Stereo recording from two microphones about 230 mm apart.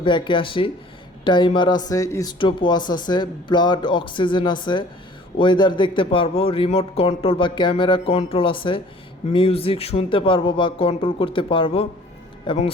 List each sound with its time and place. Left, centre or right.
0.0 s speech: left